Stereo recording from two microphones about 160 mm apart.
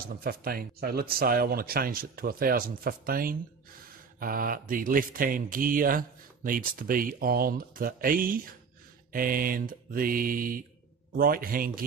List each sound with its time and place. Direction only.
0.0 s speech: 70° right (ahead or behind)